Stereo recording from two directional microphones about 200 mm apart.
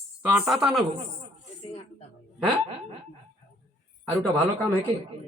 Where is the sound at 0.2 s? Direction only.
5° right (ahead or behind).